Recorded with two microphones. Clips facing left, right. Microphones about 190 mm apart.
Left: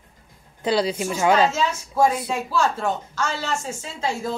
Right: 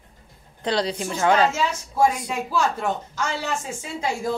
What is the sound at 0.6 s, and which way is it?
Speech, 10° left (ahead or behind).